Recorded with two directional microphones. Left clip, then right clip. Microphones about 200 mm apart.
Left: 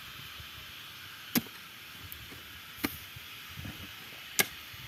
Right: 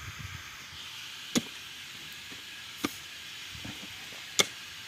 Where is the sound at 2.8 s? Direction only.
10° left (ahead or behind).